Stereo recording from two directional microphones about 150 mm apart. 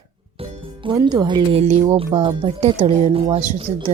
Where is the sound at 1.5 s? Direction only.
50° right (ahead or behind).